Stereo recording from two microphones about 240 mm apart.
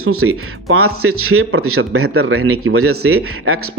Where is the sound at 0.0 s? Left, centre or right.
Right.